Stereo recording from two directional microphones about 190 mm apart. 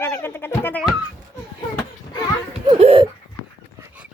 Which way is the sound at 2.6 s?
30° right (ahead or behind).